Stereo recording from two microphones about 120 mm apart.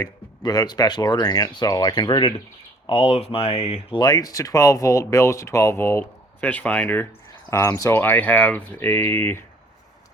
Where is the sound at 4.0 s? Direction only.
30° left (ahead or behind).